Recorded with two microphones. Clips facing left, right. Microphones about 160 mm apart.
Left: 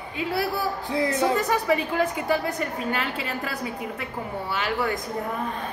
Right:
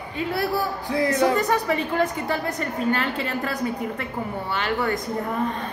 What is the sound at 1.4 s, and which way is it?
A woman's voice, 5° left (ahead or behind).